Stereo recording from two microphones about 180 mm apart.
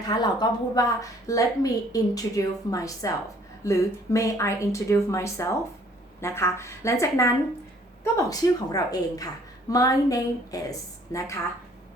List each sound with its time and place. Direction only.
0.1 s a woman's voice: 25° left (ahead or behind)